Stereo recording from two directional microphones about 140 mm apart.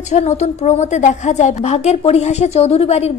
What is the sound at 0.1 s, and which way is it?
A woman's voice, 55° left (ahead or behind).